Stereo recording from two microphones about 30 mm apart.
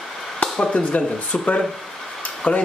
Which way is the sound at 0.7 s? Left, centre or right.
Left.